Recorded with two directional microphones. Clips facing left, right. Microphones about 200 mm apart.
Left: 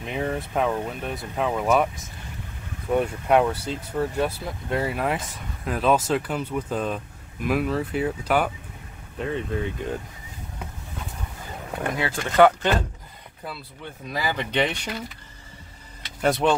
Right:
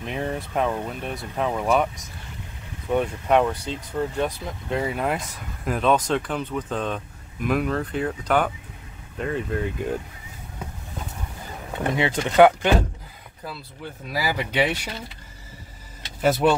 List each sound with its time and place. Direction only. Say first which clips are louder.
0.0 s speech: left 1 dB; centre (ahead or behind)
2.9 s speech: even; 5° left (ahead or behind)
11.9 s speech: right 5 dB; 20° right (ahead or behind)
14.0 s speech: right 1 dB; 10° right (ahead or behind)
16.2 s speech: right 2 dB; 5° right (ahead or behind)